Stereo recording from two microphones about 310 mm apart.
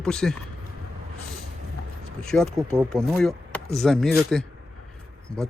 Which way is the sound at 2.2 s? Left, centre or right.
Centre.